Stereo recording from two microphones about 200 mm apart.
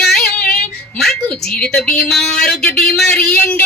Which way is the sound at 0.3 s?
50° left (ahead or behind).